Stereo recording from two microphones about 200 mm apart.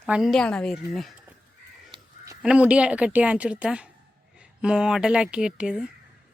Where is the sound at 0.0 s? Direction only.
Centre (ahead or behind).